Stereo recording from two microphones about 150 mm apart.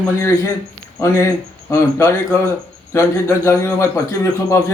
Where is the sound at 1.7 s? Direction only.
20° left (ahead or behind).